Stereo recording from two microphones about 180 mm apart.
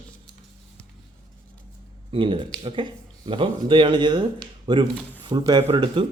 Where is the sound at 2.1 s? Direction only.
30° right (ahead or behind).